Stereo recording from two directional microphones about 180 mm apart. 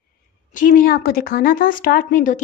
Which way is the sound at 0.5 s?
50° left (ahead or behind).